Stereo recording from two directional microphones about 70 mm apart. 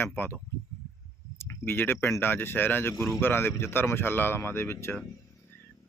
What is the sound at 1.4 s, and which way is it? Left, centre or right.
Speech, left.